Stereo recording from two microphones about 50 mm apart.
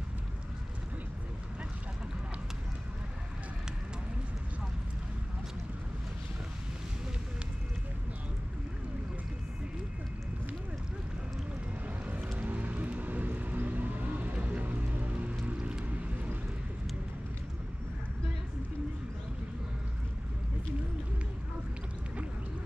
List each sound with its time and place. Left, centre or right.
12.4 s music: right
15.8 s boat: right